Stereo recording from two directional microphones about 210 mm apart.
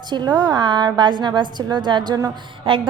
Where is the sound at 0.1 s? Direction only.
20° right (ahead or behind).